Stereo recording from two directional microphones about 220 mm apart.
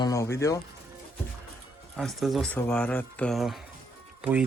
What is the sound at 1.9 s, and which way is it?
Speech, centre (ahead or behind).